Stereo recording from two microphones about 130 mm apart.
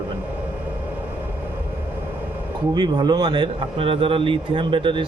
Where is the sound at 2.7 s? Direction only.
35° right (ahead or behind).